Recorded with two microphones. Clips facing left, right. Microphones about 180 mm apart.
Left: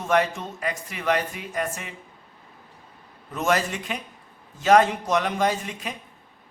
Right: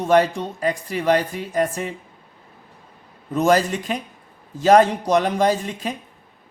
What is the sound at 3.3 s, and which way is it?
A man's voice, 35° right (ahead or behind).